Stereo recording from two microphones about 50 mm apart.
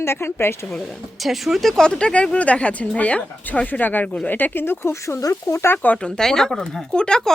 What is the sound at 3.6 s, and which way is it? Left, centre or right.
A woman's voice, left.